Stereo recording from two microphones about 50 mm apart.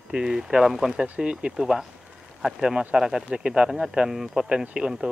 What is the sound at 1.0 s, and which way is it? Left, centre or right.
Speech, centre.